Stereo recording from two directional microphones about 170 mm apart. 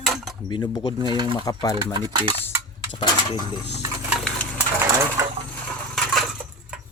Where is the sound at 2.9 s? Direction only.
25° left (ahead or behind).